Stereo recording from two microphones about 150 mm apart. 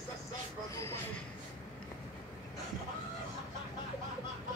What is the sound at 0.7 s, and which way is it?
Speech, 15° left (ahead or behind).